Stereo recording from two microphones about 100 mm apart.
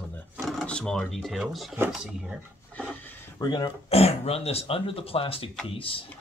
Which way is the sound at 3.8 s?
90° left.